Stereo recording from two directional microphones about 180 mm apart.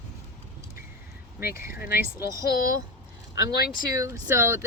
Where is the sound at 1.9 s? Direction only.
15° right (ahead or behind).